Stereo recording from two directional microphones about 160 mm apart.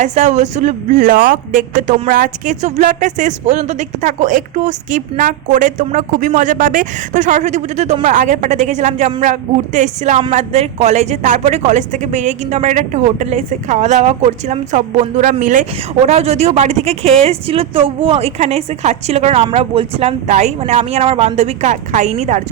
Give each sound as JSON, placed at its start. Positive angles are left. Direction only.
{"t": 0.0, "sound": "speech", "side_deg": -45}
{"t": 16.0, "sound": "speech", "side_deg": -40}